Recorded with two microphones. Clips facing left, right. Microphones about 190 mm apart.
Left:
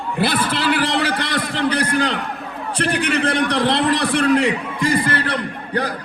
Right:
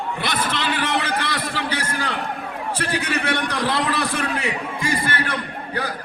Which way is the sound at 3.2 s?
30° left (ahead or behind).